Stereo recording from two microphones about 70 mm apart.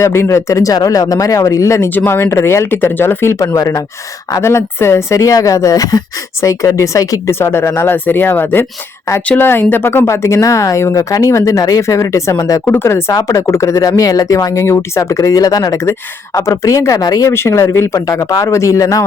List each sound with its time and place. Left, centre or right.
0.0 s speech: left
1.9 s speech: left
3.4 s speech: left
4.4 s speech: left
7.3 s speech: left
12.6 s speech: left
13.1 s speech: left
15.8 s speech: left
17.2 s speech: left